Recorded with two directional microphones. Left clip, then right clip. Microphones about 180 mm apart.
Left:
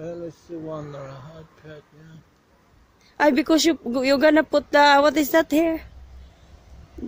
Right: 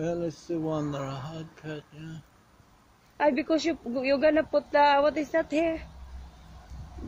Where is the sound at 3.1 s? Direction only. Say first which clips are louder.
Left 7 dB; 75° left (ahead or behind).